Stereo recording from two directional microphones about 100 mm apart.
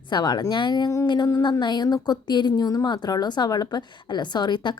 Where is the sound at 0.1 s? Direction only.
45° left (ahead or behind).